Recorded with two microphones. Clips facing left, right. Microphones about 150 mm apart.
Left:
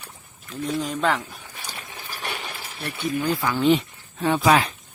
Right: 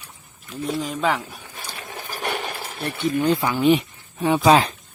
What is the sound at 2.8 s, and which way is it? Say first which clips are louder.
Speech: right 4 dB; 25° right (ahead or behind).